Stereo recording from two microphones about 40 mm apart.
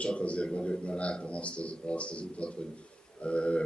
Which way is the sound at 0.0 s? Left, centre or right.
Left.